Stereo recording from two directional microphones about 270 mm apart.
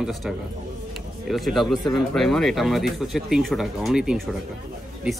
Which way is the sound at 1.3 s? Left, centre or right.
Centre.